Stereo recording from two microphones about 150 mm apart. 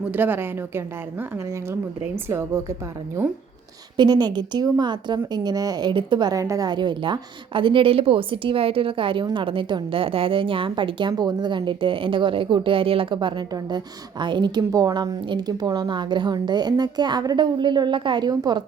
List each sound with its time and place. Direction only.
0.1 s a woman's voice: 15° right (ahead or behind)
3.9 s a woman's voice: 30° right (ahead or behind)